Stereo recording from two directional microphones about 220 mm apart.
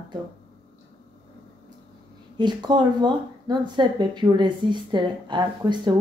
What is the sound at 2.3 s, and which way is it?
Speech, 20° right (ahead or behind).